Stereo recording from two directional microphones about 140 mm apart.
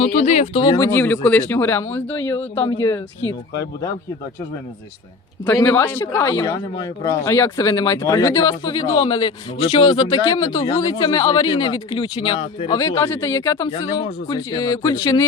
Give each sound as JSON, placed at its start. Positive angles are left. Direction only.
{"t": 0.0, "sound": "speech", "side_deg": 60}
{"t": 0.6, "sound": "a man's voice", "side_deg": 30}
{"t": 0.9, "sound": "a man's voice", "side_deg": 15}
{"t": 5.6, "sound": "a man's voice", "side_deg": 15}
{"t": 10.5, "sound": "speech", "side_deg": 50}
{"t": 10.8, "sound": "speech", "side_deg": 30}
{"t": 12.7, "sound": "a man's voice", "side_deg": 20}